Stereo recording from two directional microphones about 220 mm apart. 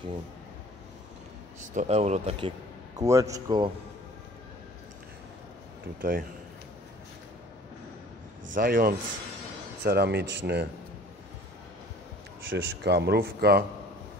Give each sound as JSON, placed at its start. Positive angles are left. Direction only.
{"t": 1.8, "sound": "speech", "side_deg": -30}
{"t": 3.0, "sound": "a man's voice", "side_deg": -15}
{"t": 5.9, "sound": "speech", "side_deg": -40}
{"t": 8.5, "sound": "speech", "side_deg": -40}
{"t": 12.4, "sound": "speech", "side_deg": -50}